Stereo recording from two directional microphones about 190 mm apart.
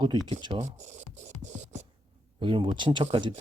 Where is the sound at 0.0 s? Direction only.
25° right (ahead or behind).